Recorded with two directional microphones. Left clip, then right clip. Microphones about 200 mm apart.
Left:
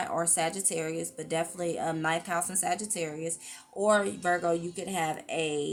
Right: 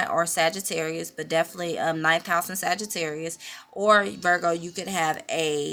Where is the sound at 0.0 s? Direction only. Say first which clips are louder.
Right 7 dB; 25° right (ahead or behind).